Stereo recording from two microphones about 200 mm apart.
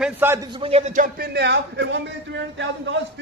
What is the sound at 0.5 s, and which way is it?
A man's voice, 30° right (ahead or behind).